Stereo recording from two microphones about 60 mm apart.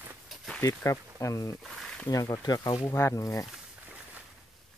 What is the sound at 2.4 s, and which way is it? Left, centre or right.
Speech, left.